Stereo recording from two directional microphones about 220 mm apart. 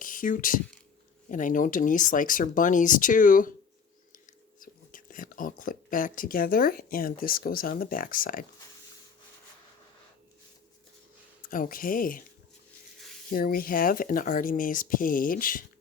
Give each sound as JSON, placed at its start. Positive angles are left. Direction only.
{"t": 0.0, "sound": "speech", "side_deg": 40}
{"t": 11.4, "sound": "speech", "side_deg": 40}
{"t": 13.3, "sound": "speech", "side_deg": 40}